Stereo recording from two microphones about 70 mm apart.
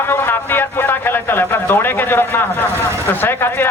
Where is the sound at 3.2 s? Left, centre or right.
Left.